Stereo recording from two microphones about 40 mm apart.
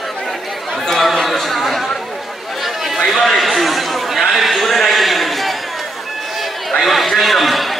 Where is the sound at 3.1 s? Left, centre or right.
Centre.